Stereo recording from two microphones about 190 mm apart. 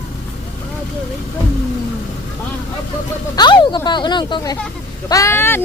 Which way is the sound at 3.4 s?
25° left (ahead or behind).